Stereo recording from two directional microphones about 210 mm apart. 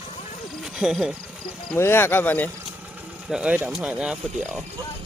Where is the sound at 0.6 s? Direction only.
5° right (ahead or behind).